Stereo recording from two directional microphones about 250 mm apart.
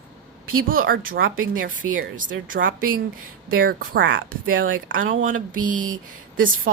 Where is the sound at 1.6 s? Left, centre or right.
Right.